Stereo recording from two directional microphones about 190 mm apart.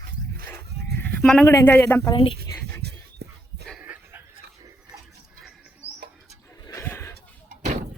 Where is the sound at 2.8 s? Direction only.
60° right (ahead or behind).